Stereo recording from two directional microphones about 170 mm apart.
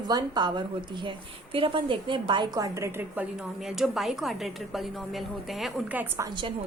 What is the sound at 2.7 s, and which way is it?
Speech, 15° right (ahead or behind).